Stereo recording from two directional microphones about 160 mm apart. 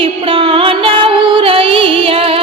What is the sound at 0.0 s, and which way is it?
Music, 35° right (ahead or behind).